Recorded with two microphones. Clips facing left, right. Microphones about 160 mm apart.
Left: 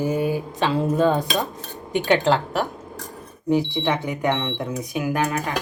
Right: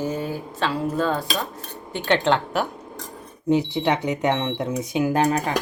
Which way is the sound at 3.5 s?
20° right (ahead or behind).